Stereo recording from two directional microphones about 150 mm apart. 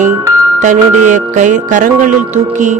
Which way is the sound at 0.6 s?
55° right (ahead or behind).